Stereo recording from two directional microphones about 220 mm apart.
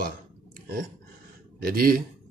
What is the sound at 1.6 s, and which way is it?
Speech, 40° right (ahead or behind).